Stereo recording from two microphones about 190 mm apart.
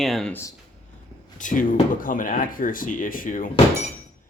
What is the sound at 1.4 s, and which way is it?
Speech, 45° left (ahead or behind).